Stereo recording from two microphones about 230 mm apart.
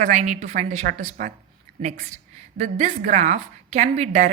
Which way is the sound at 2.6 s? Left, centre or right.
Right.